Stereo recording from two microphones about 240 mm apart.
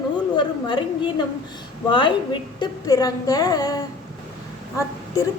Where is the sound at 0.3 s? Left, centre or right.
Centre.